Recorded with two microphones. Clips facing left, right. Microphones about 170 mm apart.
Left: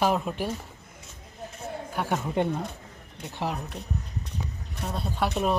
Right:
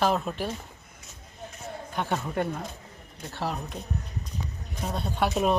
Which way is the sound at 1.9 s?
10° left (ahead or behind).